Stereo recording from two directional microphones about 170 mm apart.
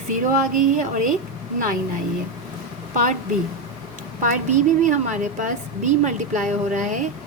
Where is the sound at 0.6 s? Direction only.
50° right (ahead or behind).